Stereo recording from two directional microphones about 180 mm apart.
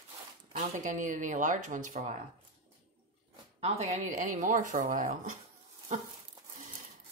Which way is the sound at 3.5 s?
35° right (ahead or behind).